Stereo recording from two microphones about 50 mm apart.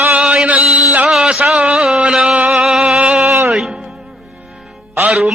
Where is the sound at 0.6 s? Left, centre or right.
Centre.